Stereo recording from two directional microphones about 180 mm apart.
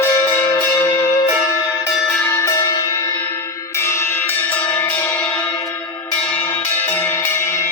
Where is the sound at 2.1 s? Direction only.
15° left (ahead or behind).